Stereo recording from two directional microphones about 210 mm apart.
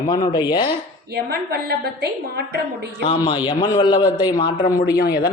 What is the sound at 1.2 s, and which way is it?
A woman's voice, 50° right (ahead or behind).